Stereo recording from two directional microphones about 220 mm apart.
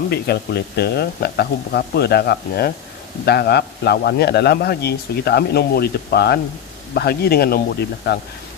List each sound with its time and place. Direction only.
0.1 s a man's voice: 45° left (ahead or behind)